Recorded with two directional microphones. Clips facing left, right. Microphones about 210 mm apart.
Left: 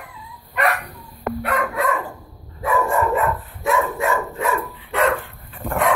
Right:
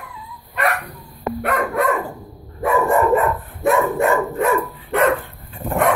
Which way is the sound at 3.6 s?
55° right (ahead or behind).